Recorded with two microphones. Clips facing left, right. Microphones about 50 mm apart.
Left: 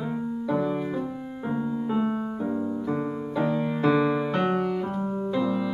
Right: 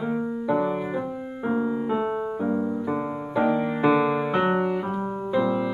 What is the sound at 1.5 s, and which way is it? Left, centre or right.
Piano, centre.